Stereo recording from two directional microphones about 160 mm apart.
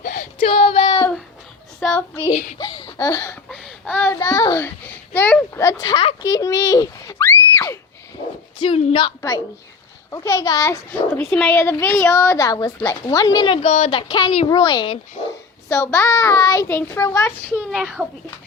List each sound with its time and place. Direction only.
0.0 s child singing: 55° left (ahead or behind)
0.4 s female singing: 40° left (ahead or behind)
1.8 s a child's voice: 10° left (ahead or behind)
2.6 s laughter: 30° left (ahead or behind)
3.5 s a sound: 5° left (ahead or behind)
4.2 s a woman's voice: 20° left (ahead or behind)
8.6 s speech: 35° left (ahead or behind)
10.1 s a child's voice: 20° left (ahead or behind)
15.7 s a child's voice: 15° left (ahead or behind)
18.0 s speech: 5° right (ahead or behind)